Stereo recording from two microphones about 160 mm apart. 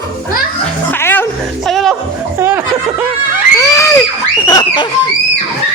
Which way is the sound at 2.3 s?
15° right (ahead or behind).